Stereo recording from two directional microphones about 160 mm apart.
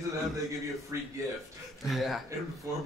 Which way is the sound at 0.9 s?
20° right (ahead or behind).